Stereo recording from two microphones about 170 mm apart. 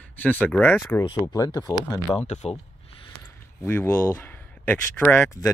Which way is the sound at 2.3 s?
40° left (ahead or behind).